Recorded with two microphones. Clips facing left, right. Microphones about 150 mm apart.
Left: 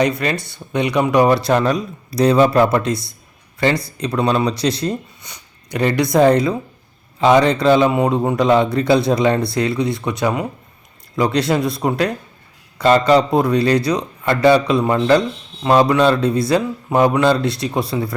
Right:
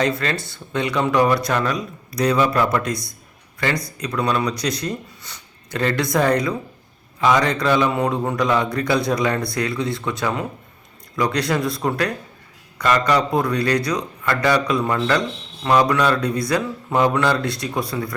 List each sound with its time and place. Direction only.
0.0 s speech: 15° left (ahead or behind)